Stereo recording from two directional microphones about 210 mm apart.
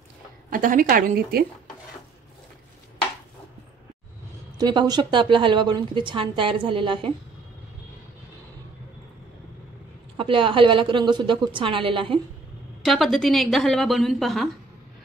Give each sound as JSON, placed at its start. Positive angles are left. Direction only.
{"t": 0.5, "sound": "a woman's voice", "side_deg": -40}
{"t": 4.6, "sound": "a woman's voice", "side_deg": -20}
{"t": 10.1, "sound": "a woman's voice", "side_deg": -25}
{"t": 12.8, "sound": "a woman's voice", "side_deg": 0}